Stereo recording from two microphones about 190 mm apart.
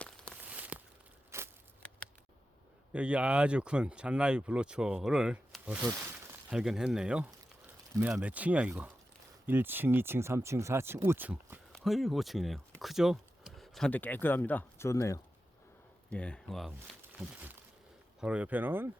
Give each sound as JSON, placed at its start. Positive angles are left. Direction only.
{"t": 0.0, "sound": "walk", "side_deg": 5}
{"t": 0.4, "sound": "a sound", "side_deg": -5}
{"t": 2.9, "sound": "speech", "side_deg": -5}
{"t": 16.0, "sound": "speech", "side_deg": 5}